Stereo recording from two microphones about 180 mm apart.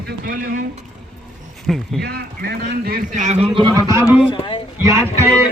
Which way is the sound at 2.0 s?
65° right (ahead or behind).